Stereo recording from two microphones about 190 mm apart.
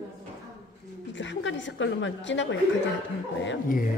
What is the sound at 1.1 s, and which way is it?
A woman's voice, 70° left (ahead or behind).